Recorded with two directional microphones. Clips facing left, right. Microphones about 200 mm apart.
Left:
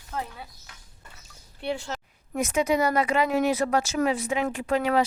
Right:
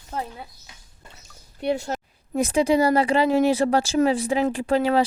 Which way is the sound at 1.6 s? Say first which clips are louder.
Right 6 dB; 40° right (ahead or behind).